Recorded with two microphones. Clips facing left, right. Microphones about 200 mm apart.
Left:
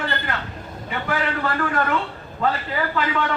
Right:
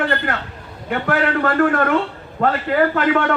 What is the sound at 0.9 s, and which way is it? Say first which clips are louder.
A man's voice: right 6 dB; 55° right (ahead or behind).